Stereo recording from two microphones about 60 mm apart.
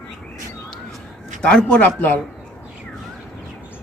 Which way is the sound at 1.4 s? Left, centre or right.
Centre.